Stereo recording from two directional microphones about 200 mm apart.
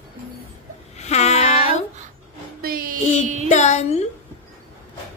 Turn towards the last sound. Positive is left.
turn(degrees=35)  # may be behind; listen again after turning